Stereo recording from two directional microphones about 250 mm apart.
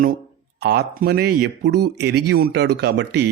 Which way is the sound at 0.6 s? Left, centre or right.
Right.